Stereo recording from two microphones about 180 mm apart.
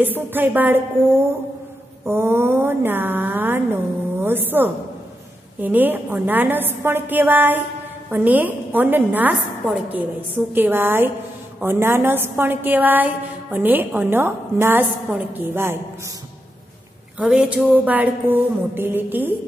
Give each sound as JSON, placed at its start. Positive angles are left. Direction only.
{"t": 0.0, "sound": "a woman's voice", "side_deg": -10}
{"t": 17.2, "sound": "a woman's voice", "side_deg": -5}